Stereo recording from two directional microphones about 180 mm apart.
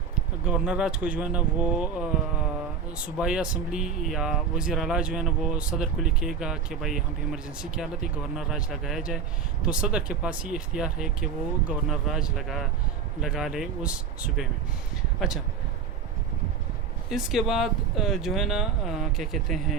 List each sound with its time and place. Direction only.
0.4 s speech: 5° right (ahead or behind)
3.2 s speech: 5° right (ahead or behind)
17.1 s speech: centre (ahead or behind)